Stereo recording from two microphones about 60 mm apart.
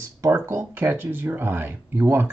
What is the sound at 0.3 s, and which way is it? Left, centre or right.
Speech, right.